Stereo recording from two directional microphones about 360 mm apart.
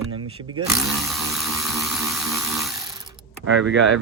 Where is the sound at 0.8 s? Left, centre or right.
Centre.